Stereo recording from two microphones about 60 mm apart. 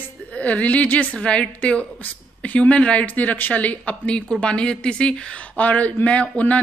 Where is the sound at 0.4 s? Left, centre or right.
Left.